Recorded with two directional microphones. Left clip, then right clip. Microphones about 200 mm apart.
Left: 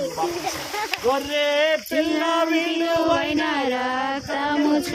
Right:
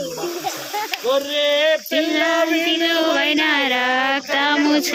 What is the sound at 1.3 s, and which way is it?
Speech, 55° left (ahead or behind).